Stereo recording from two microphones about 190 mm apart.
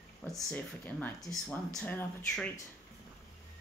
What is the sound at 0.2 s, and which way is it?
Speech, 5° left (ahead or behind).